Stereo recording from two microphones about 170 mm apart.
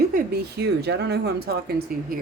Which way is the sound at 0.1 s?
75° right (ahead or behind).